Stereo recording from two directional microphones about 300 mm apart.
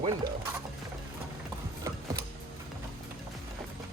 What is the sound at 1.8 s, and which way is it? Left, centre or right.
Mechanisms, centre.